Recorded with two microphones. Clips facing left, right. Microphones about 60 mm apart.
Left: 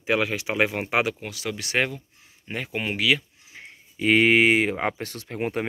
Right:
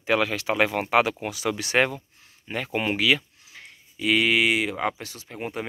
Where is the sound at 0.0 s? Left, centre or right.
Centre.